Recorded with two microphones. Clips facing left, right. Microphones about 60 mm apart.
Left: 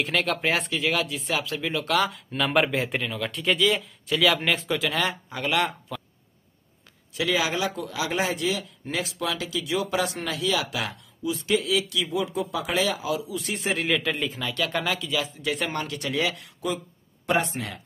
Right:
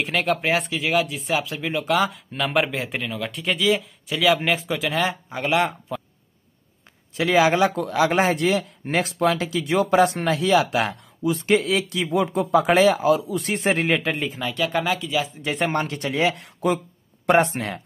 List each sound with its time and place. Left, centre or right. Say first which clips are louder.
0.0 s speech: right 2 dB; centre
2.0 s speech: right 1 dB; centre
5.0 s speech: right 3 dB; right
7.2 s a man's voice: right 7 dB; right
14.2 s speech: right 3 dB; centre
15.3 s a man's voice: right 5 dB; right
17.3 s speech: right 7 dB; right